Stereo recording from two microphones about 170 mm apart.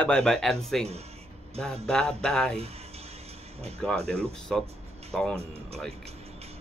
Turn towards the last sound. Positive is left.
turn(degrees=5)  # may be behind; listen again after turning